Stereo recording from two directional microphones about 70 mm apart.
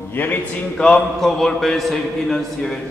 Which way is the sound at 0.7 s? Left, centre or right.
Centre.